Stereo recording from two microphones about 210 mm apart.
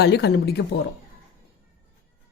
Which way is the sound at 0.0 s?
50° left (ahead or behind).